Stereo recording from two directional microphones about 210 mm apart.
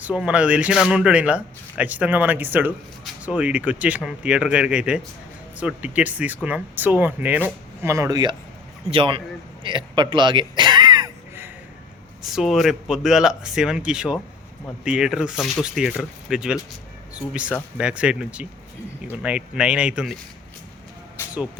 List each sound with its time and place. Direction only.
0.0 s a man's voice: 5° right (ahead or behind); by 9.2 s 25° right (ahead or behind)
9.6 s gasp: 20° right (ahead or behind)
12.3 s speech: centre (ahead or behind)
21.2 s vehicle: 10° left (ahead or behind)